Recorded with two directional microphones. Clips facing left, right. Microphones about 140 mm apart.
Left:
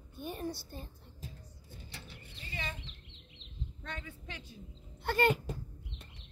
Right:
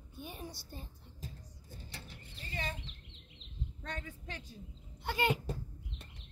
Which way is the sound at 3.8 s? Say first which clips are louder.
Right 1 dB; 40° right (ahead or behind).